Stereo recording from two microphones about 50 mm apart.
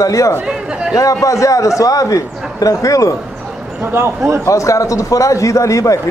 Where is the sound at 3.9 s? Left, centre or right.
Right.